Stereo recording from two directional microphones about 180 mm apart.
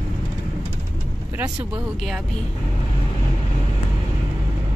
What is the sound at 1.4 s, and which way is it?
Speech, 25° right (ahead or behind).